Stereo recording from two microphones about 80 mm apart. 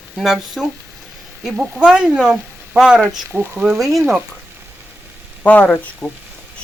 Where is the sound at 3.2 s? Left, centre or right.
Right.